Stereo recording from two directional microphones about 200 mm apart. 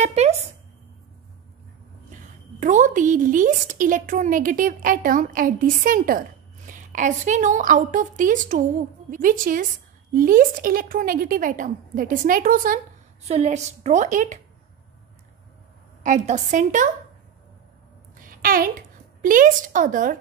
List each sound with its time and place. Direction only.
0.0 s a sound: 35° right (ahead or behind)
2.6 s a woman's voice: 40° right (ahead or behind)
16.0 s a woman's voice: 40° right (ahead or behind)
18.1 s a woman's voice: 45° right (ahead or behind)